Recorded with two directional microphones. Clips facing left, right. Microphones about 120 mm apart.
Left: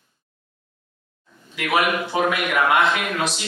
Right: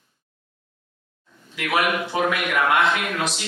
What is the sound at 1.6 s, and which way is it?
A man's voice, 20° left (ahead or behind).